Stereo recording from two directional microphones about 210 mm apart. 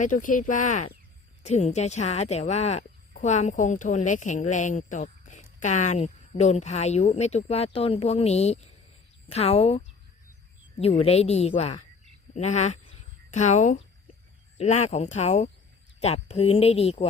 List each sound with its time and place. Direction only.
0.0 s a woman's voice: 40° left (ahead or behind)